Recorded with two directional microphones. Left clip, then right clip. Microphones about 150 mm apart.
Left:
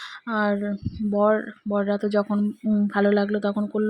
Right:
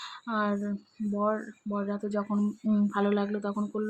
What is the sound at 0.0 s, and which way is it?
Speech, 35° left (ahead or behind).